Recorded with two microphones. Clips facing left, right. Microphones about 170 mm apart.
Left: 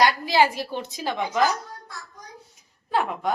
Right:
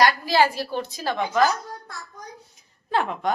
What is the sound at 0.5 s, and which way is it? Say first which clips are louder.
Speech: right 2 dB; 20° left (ahead or behind).